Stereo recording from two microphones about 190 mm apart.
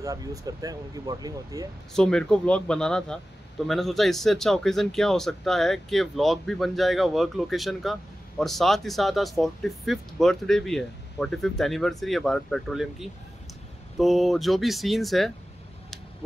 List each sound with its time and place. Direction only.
0.0 s speech: 20° right (ahead or behind)
2.0 s speech: 5° left (ahead or behind)